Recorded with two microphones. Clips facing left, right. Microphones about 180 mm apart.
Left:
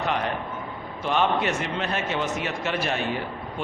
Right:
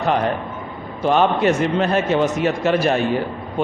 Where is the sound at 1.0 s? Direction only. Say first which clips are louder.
Right 7 dB; 40° right (ahead or behind).